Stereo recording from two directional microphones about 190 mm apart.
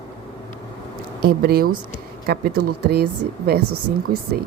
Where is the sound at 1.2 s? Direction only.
55° right (ahead or behind).